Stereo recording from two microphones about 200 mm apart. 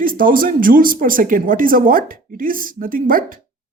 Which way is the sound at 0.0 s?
45° right (ahead or behind).